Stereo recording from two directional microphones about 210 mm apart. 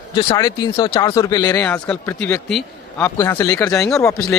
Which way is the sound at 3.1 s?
15° left (ahead or behind).